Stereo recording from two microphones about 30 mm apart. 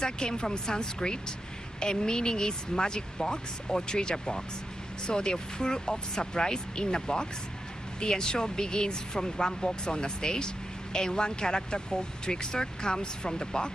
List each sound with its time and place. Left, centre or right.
0.0 s speech: left